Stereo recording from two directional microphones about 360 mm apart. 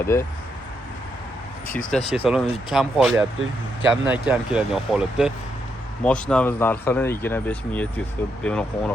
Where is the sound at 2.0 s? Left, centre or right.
Centre.